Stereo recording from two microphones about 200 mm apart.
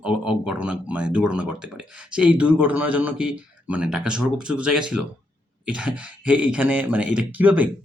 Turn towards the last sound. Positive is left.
turn(degrees=-5)  # may be behind; listen again after turning